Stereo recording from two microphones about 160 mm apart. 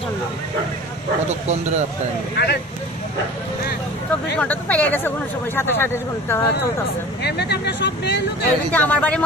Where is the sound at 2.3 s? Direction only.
90° left.